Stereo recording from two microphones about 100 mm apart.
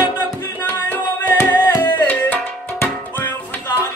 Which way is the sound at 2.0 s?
15° left (ahead or behind).